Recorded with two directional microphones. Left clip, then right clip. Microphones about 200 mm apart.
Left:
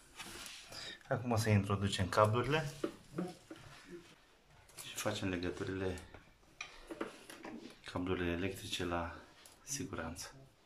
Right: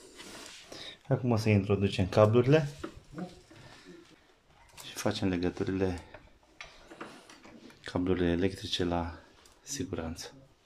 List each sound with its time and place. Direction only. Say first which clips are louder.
0.7 s speech: right 5 dB; 15° right (ahead or behind)
4.8 s speech: right 6 dB; 25° right (ahead or behind)
7.8 s speech: right 8 dB; 30° right (ahead or behind)